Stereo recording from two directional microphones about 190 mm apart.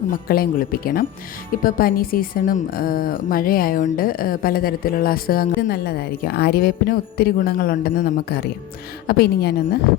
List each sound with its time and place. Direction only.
0.1 s a woman's voice: 50° left (ahead or behind)